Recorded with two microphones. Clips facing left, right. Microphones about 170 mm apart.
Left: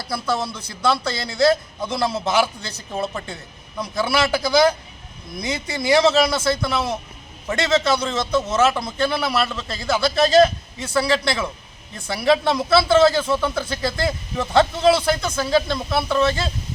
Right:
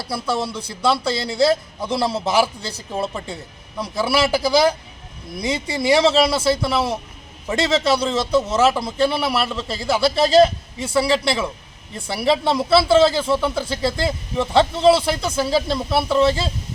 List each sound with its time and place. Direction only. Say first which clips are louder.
0.3 s a man's voice: right 1 dB; 30° right (ahead or behind)
4.1 s a man's voice: right 2 dB; 30° right (ahead or behind)
13.3 s speech: right 2 dB; 5° right (ahead or behind)
13.6 s a man's voice: right 2 dB; 30° right (ahead or behind)